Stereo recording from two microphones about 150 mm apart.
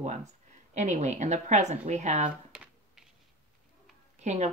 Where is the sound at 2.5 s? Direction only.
5° right (ahead or behind).